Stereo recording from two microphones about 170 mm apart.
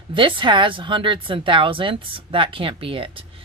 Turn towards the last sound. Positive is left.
turn(degrees=-30)  # may be behind; listen again after turning